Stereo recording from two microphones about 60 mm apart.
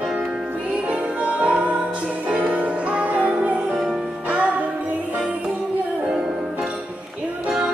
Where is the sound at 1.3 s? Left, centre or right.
Right.